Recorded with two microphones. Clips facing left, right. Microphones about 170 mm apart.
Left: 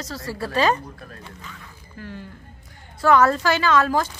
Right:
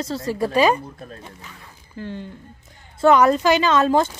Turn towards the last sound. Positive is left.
turn(degrees=-25)  # may be behind; listen again after turning